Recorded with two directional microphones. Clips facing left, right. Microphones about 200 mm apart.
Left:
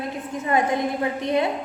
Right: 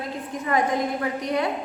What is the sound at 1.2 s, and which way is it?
Speech, 25° left (ahead or behind).